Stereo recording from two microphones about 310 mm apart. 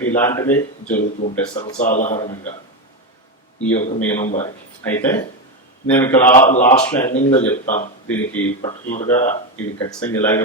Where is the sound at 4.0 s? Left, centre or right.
Centre.